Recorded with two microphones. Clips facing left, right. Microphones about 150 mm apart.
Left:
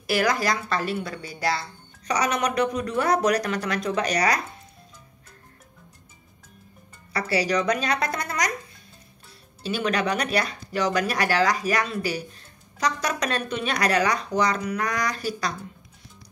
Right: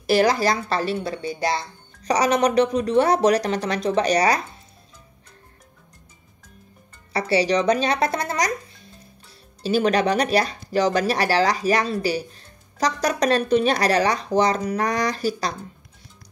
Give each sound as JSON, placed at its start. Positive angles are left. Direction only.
{"t": 0.0, "sound": "speech", "side_deg": -30}
{"t": 2.0, "sound": "speech", "side_deg": -30}
{"t": 7.1, "sound": "speech", "side_deg": -25}
{"t": 9.6, "sound": "speech", "side_deg": -35}